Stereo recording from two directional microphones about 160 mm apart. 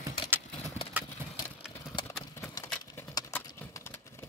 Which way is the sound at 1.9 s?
30° left (ahead or behind).